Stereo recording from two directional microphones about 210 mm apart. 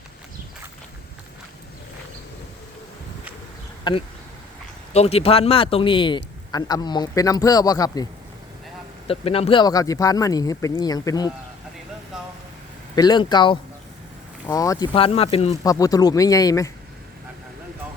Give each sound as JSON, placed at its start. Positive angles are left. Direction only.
{"t": 3.9, "sound": "a man's voice", "side_deg": 20}
{"t": 9.0, "sound": "speech", "side_deg": 30}
{"t": 13.0, "sound": "a man's voice", "side_deg": 20}
{"t": 15.6, "sound": "speech", "side_deg": 15}